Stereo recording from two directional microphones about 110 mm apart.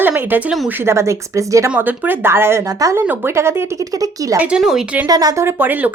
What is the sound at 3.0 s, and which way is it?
Speech, 15° right (ahead or behind).